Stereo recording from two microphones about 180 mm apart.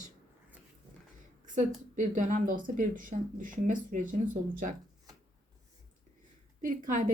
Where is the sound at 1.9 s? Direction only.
45° right (ahead or behind).